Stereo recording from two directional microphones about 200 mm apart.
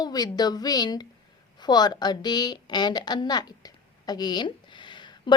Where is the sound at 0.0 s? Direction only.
20° left (ahead or behind).